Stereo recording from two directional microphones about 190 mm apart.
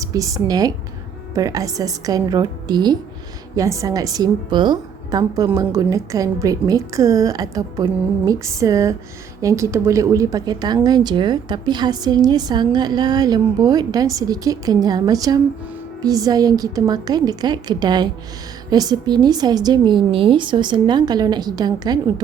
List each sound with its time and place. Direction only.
0.0 s a woman's voice: 20° right (ahead or behind)